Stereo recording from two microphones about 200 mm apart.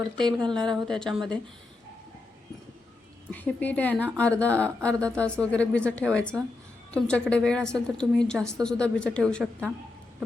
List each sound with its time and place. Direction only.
0.3 s a woman's voice: 20° right (ahead or behind)
0.5 s a woman's voice: 5° left (ahead or behind)
3.3 s a woman's voice: 10° left (ahead or behind)